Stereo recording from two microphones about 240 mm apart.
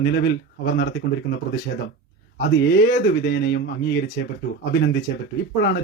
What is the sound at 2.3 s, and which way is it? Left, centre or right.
Speech, left.